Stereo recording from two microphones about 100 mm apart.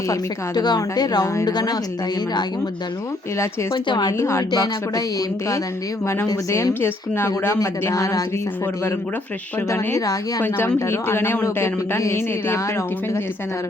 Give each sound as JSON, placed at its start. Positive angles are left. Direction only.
{"t": 0.1, "sound": "speech", "side_deg": 45}
{"t": 3.3, "sound": "a woman's voice", "side_deg": 30}
{"t": 3.8, "sound": "a woman's voice", "side_deg": 45}
{"t": 4.2, "sound": "speech", "side_deg": 30}
{"t": 6.2, "sound": "a woman's voice", "side_deg": 30}
{"t": 9.6, "sound": "a woman's voice", "side_deg": 30}